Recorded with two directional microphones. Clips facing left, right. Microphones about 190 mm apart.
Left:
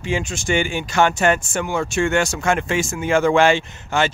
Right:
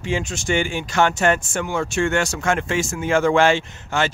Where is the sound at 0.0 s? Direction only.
10° left (ahead or behind).